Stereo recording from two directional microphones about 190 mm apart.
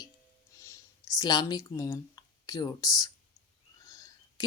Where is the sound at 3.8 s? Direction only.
20° left (ahead or behind).